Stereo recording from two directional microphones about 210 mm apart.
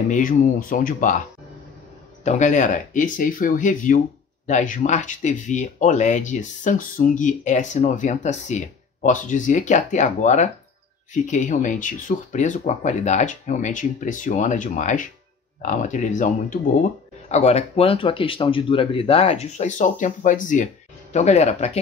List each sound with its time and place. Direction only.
0.1 s speech: 40° left (ahead or behind)
2.2 s speech: 35° left (ahead or behind)